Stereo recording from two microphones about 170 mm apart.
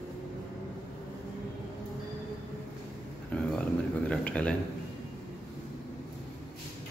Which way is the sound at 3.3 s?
5° left (ahead or behind).